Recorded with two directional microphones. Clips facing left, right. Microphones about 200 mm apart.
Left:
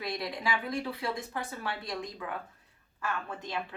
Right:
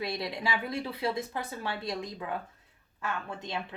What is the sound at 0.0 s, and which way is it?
Speech, 25° right (ahead or behind).